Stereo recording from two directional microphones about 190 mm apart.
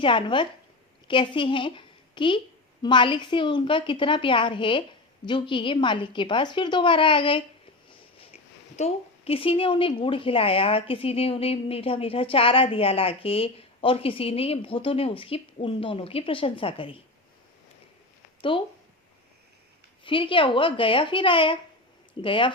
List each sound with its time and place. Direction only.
0.0 s a woman's voice: 25° left (ahead or behind)
18.5 s a woman's voice: 25° left (ahead or behind)
20.1 s a woman's voice: 25° left (ahead or behind)